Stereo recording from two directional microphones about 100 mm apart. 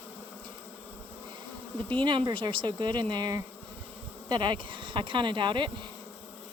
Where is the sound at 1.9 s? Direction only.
55° right (ahead or behind).